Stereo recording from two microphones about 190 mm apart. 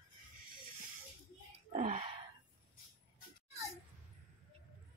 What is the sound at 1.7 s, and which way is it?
Speech, 35° right (ahead or behind).